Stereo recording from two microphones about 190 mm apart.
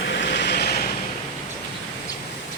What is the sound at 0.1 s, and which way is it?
Vehicle, 65° left (ahead or behind).